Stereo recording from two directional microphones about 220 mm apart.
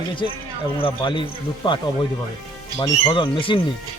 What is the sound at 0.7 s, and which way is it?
Speech, 20° left (ahead or behind).